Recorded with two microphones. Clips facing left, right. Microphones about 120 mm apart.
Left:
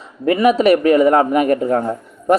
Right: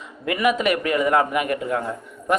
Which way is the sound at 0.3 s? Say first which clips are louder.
Left 8 dB; 30° left (ahead or behind).